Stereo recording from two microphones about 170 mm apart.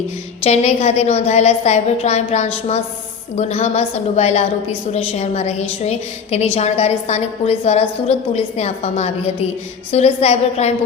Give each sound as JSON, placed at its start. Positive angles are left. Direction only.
{"t": 0.4, "sound": "a woman's voice", "side_deg": 40}